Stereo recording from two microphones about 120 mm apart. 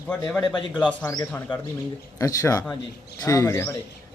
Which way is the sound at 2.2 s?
25° left (ahead or behind).